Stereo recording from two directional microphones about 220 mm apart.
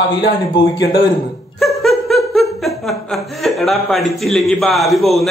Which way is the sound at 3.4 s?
Centre (ahead or behind).